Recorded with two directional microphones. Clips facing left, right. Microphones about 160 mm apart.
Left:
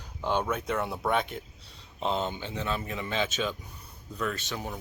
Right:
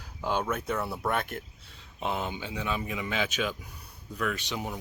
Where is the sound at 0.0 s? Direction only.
5° right (ahead or behind).